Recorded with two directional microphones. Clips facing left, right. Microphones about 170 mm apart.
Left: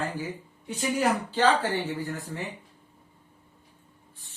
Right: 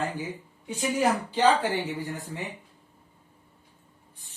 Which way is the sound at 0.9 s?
15° right (ahead or behind).